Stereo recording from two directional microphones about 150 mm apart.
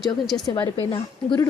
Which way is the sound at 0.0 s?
Centre (ahead or behind).